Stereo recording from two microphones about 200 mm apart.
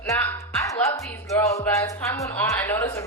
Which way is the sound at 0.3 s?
15° left (ahead or behind).